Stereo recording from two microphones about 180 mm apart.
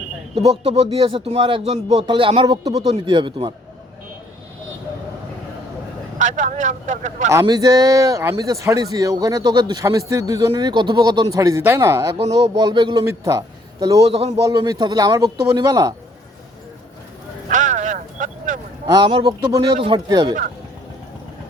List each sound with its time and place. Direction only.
0.6 s speech: 30° right (ahead or behind)
6.1 s speech: 45° right (ahead or behind)
7.3 s speech: 20° right (ahead or behind)
14.0 s a man's voice: 35° right (ahead or behind)
14.4 s speech: 20° right (ahead or behind)
17.5 s vehicle: 45° right (ahead or behind)
18.9 s speech: 25° right (ahead or behind)